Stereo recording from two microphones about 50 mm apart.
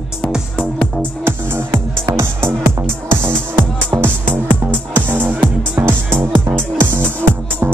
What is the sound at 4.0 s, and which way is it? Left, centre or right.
Music, right.